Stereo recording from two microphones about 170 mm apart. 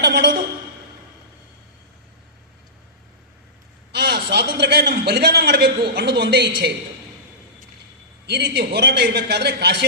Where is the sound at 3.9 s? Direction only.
75° right (ahead or behind).